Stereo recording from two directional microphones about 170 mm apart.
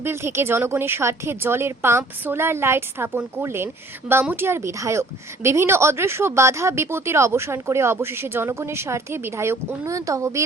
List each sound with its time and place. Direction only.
0.0 s speech: 15° right (ahead or behind)